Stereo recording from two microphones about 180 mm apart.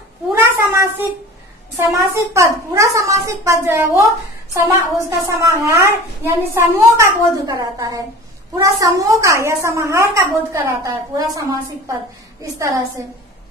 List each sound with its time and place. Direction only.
0.4 s a sound: 15° right (ahead or behind)
2.0 s a woman's voice: 15° right (ahead or behind)
12.5 s a woman's voice: 20° right (ahead or behind)